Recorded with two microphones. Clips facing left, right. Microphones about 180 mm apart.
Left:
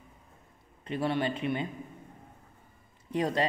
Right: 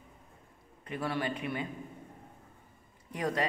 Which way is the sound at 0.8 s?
25° left (ahead or behind).